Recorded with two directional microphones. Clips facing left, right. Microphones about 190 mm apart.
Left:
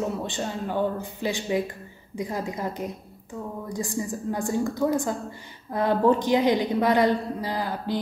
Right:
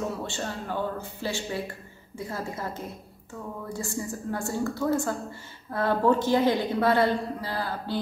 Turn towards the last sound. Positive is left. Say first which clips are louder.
# left 3 dB
turn(degrees=15)  # may be behind; listen again after turning